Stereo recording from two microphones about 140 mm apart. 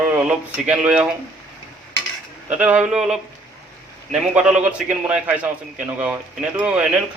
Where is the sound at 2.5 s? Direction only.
10° right (ahead or behind).